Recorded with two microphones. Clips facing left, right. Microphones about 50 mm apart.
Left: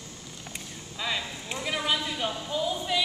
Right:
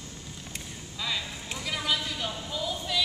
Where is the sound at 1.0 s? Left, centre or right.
Centre.